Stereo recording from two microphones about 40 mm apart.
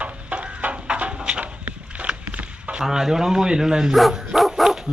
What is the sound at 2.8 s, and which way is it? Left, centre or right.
A man's voice, centre.